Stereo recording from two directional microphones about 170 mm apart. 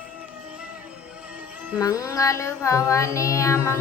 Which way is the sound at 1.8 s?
20° left (ahead or behind).